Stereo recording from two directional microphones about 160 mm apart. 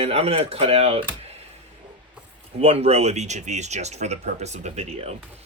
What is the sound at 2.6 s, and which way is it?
Speech, 40° right (ahead or behind).